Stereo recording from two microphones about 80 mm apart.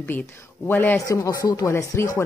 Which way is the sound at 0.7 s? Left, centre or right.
Left.